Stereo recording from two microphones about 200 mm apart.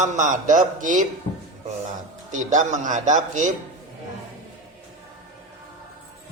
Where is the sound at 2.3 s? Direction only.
40° right (ahead or behind).